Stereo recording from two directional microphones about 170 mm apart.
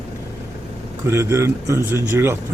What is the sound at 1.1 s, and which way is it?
Speech, 15° right (ahead or behind).